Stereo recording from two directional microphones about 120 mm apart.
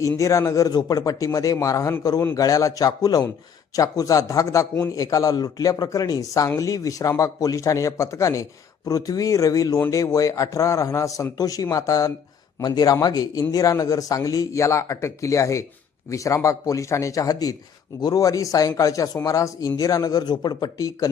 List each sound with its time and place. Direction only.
0.2 s a man's voice: 25° left (ahead or behind)